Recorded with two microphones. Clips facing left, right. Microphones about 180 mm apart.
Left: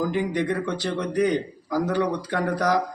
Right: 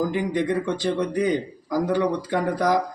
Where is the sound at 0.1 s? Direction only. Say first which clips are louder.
Right 1 dB; 15° right (ahead or behind).